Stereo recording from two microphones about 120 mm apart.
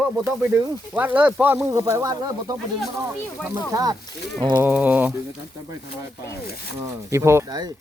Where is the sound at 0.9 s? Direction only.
15° right (ahead or behind); by 2.5 s 30° right (ahead or behind).